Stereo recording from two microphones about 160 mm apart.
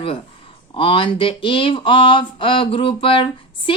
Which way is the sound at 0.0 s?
35° left (ahead or behind).